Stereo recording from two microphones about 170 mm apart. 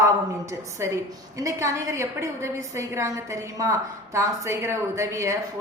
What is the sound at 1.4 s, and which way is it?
A woman's voice, 20° right (ahead or behind).